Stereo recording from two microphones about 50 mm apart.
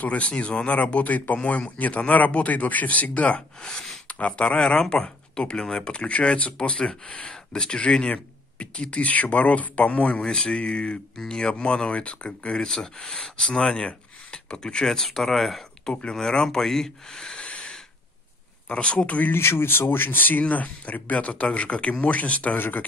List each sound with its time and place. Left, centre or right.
0.0 s speech: left
3.6 s speech: centre
4.6 s speech: centre
10.2 s speech: centre
15.8 s speech: centre
19.3 s speech: left